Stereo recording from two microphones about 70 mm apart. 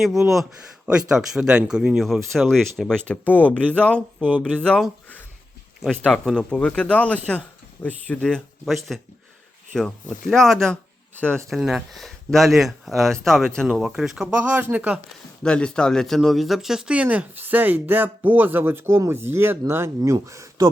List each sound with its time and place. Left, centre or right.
0.0 s speech: centre
2.0 s speech: centre
2.9 s speech: centre
5.8 s speech: centre; by 8.2 s left
8.2 s speech: centre
11.2 s speech: centre
11.4 s speech: centre
13.7 s speech: centre
14.3 s speech: right
15.4 s speech: centre; by 19.9 s right
20.2 s speech: right